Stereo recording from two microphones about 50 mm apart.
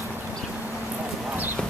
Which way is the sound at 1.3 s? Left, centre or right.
Right.